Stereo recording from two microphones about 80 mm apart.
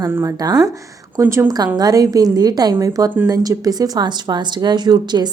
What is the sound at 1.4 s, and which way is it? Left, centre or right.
A woman's voice, right.